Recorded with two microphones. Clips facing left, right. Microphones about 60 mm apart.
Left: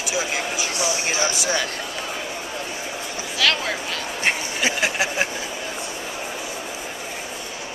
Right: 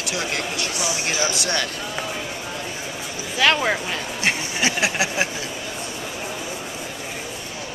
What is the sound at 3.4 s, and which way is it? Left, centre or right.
Speech, right.